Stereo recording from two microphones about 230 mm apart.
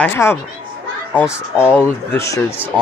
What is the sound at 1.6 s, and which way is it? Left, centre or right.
Speech, centre.